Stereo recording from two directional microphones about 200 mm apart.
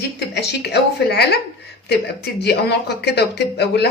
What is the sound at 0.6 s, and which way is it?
Speech, 55° left (ahead or behind).